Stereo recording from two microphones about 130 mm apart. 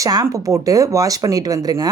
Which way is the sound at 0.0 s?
30° right (ahead or behind).